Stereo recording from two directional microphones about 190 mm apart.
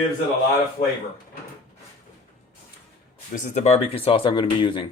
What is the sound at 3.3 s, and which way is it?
Speech, 40° left (ahead or behind).